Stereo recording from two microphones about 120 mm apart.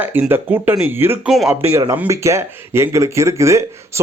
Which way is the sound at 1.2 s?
5° right (ahead or behind).